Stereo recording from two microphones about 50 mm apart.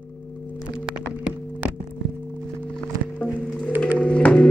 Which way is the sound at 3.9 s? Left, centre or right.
Left.